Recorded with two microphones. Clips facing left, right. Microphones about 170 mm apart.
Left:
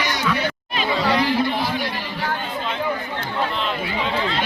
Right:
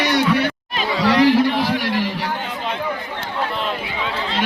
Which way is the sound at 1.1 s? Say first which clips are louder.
Right 8 dB; 85° right.